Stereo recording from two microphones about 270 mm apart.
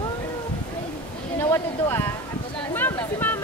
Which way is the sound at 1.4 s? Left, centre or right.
Centre.